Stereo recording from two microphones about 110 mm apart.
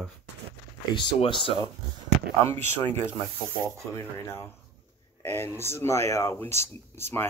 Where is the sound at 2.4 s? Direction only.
20° left (ahead or behind).